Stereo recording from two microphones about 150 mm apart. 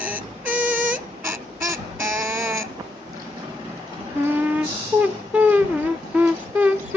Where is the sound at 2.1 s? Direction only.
20° right (ahead or behind).